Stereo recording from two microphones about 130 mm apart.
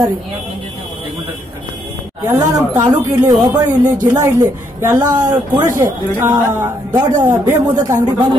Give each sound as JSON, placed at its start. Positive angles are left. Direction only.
{"t": 2.3, "sound": "speech", "side_deg": -25}